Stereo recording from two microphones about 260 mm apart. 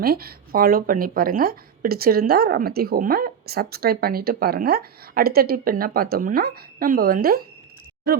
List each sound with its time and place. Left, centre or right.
0.0 s speech: right